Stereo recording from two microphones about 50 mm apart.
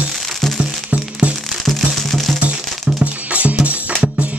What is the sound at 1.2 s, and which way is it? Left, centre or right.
Music, right.